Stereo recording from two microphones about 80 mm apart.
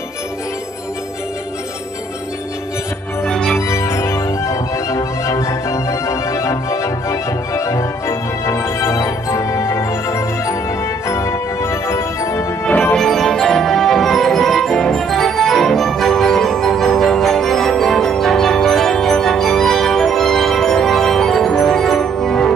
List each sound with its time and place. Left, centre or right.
3.3 s music: centre
3.5 s music: left
12.9 s music: centre